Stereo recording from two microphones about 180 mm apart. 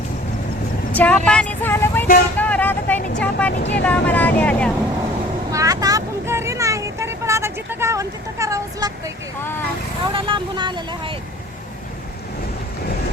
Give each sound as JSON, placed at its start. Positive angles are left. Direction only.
{"t": 0.9, "sound": "a sound", "side_deg": 5}
{"t": 2.4, "sound": "vehicle", "side_deg": 10}
{"t": 3.6, "sound": "speech", "side_deg": 75}
{"t": 3.8, "sound": "speech", "side_deg": 10}
{"t": 5.5, "sound": "vehicle", "side_deg": -20}
{"t": 10.1, "sound": "speech", "side_deg": -30}